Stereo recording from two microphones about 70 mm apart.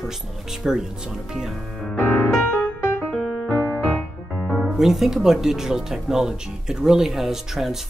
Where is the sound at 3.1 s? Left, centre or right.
Centre.